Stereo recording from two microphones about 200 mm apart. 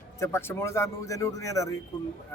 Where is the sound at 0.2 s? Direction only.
15° left (ahead or behind).